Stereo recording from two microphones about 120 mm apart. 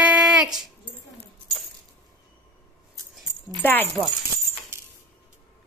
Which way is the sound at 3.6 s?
15° left (ahead or behind).